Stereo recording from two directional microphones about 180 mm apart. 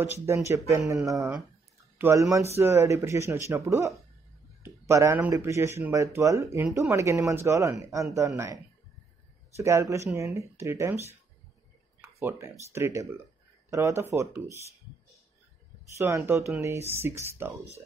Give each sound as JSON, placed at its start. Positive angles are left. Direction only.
{"t": 0.3, "sound": "speech", "side_deg": -15}
{"t": 9.6, "sound": "speech", "side_deg": -15}
{"t": 12.2, "sound": "speech", "side_deg": -15}
{"t": 16.0, "sound": "speech", "side_deg": -15}